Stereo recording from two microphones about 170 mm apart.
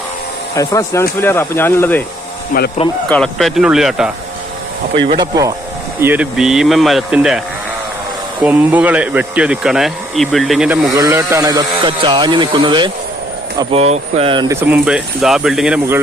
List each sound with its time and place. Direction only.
0.5 s speech: 20° left (ahead or behind)
2.5 s speech: 55° left (ahead or behind)
3.1 s speech: 5° left (ahead or behind)
4.9 s speech: 30° right (ahead or behind)
6.0 s speech: 10° right (ahead or behind)
8.4 s speech: 10° right (ahead or behind)
10.9 s speech: 20° right (ahead or behind)
14.4 s speech: 15° right (ahead or behind)